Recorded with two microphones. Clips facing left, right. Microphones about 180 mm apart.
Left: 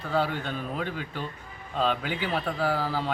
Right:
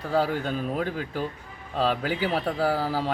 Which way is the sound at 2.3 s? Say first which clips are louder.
Right 1 dB; 10° right (ahead or behind).